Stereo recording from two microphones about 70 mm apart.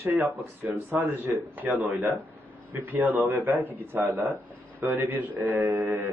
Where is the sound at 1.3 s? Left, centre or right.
Centre.